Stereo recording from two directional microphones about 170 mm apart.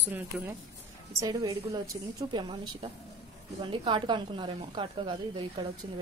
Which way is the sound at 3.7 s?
30° right (ahead or behind).